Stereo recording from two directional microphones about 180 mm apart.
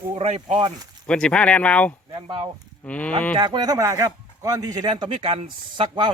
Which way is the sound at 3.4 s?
25° right (ahead or behind).